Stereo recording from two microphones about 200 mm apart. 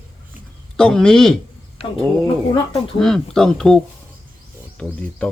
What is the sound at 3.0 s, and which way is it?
Speech, centre (ahead or behind).